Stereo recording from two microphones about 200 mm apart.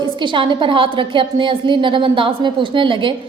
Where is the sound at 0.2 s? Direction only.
25° right (ahead or behind).